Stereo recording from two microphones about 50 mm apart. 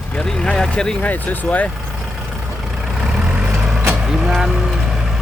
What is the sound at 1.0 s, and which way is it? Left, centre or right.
Speech, left.